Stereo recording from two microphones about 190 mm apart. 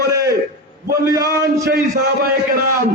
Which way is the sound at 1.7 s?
55° right (ahead or behind).